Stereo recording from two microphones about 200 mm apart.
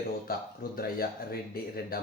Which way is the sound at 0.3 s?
50° left (ahead or behind).